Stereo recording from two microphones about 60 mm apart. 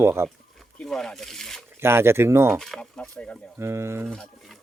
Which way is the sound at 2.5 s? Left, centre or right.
Centre.